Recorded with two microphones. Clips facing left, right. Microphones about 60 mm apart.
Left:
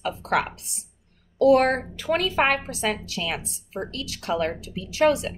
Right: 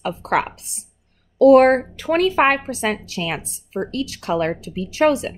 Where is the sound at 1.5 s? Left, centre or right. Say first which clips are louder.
Right 7 dB; right.